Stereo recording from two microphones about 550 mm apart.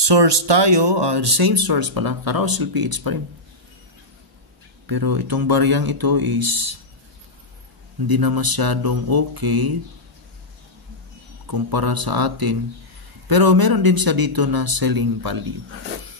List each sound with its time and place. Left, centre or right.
0.0 s speech: right
4.8 s speech: right
8.1 s speech: right
11.4 s speech: right